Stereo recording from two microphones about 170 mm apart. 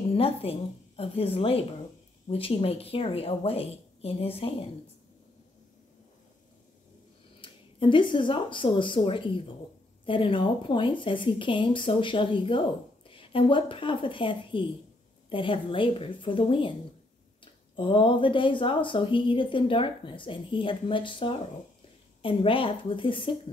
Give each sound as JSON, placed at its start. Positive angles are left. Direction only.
{"t": 0.1, "sound": "a woman's voice", "side_deg": 35}
{"t": 7.4, "sound": "a woman's voice", "side_deg": 30}
{"t": 17.7, "sound": "a woman's voice", "side_deg": 30}